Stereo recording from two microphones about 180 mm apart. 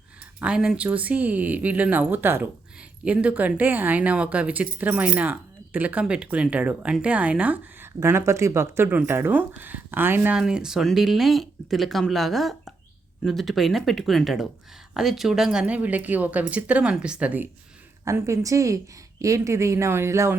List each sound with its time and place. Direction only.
0.3 s speech: 5° right (ahead or behind)